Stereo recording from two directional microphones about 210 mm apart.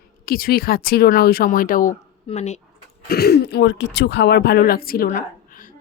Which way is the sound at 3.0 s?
50° left (ahead or behind).